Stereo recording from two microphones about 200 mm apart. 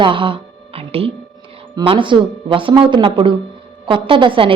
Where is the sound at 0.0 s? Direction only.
25° right (ahead or behind).